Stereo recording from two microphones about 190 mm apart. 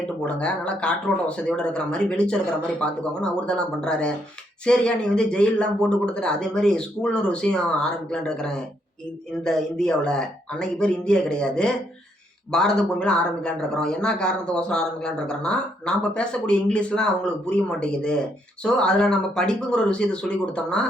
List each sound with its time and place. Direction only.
0.0 s speech: 5° left (ahead or behind)